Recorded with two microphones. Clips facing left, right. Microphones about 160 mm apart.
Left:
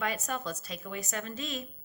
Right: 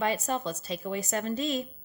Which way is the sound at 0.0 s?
30° right (ahead or behind).